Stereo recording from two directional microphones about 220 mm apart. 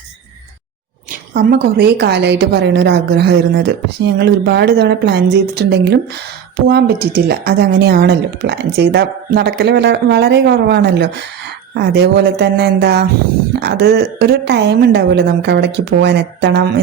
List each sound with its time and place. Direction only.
1.3 s a woman's voice: 40° right (ahead or behind)